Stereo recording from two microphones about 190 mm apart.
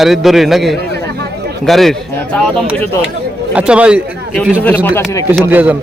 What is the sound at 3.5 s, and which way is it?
A man's voice, 5° right (ahead or behind).